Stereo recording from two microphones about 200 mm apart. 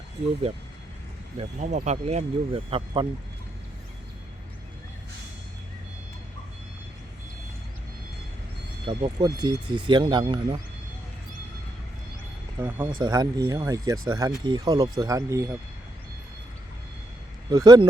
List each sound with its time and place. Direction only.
1.4 s speech: 35° right (ahead or behind)
8.9 s speech: 25° right (ahead or behind)
12.6 s speech: 10° right (ahead or behind)
17.5 s speech: 20° right (ahead or behind)